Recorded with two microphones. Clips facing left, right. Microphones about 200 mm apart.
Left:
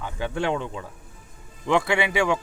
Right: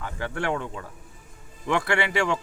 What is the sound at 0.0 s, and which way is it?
Speech, 20° left (ahead or behind).